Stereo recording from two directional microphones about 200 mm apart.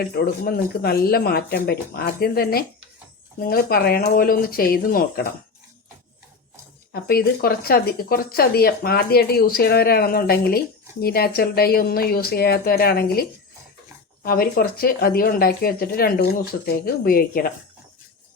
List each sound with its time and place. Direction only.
0.0 s a woman's voice: 50° left (ahead or behind)
6.9 s a woman's voice: 50° left (ahead or behind)